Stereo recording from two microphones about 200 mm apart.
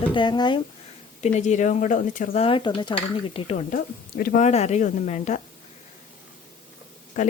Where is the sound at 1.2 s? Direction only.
35° left (ahead or behind).